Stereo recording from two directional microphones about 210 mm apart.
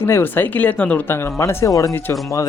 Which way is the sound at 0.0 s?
10° left (ahead or behind).